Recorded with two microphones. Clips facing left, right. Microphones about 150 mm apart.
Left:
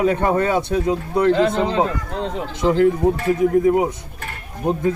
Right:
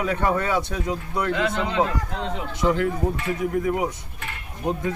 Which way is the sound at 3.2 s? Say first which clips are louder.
Left 8 dB; 40° left (ahead or behind).